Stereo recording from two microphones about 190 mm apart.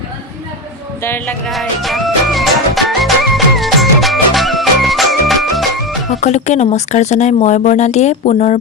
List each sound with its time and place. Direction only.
1.0 s music: 10° left (ahead or behind)
1.5 s music: centre (ahead or behind)
6.1 s speech: 35° left (ahead or behind)